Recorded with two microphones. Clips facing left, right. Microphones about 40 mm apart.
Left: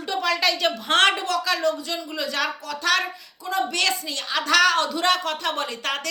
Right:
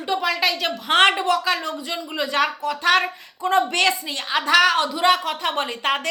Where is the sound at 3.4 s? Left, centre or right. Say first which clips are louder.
Right 6 dB; right.